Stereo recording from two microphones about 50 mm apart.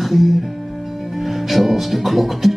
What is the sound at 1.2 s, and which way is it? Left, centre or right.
Music, centre.